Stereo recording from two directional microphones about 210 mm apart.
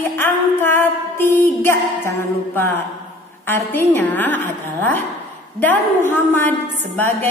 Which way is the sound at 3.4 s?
10° left (ahead or behind).